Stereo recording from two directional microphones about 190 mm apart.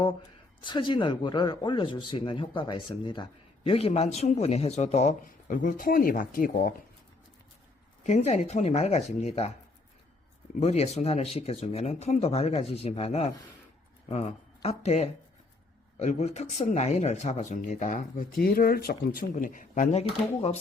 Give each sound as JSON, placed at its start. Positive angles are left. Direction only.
{"t": 0.6, "sound": "speech", "side_deg": 25}
{"t": 8.0, "sound": "speech", "side_deg": 35}
{"t": 10.6, "sound": "speech", "side_deg": 35}